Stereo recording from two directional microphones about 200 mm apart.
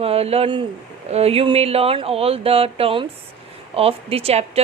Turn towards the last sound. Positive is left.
turn(degrees=-30)  # may be behind; listen again after turning